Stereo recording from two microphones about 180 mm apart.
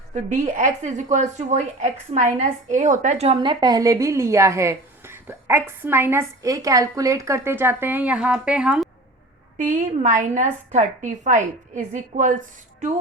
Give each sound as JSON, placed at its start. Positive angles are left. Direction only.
{"t": 0.1, "sound": "a woman's voice", "side_deg": -40}
{"t": 9.6, "sound": "a woman's voice", "side_deg": -45}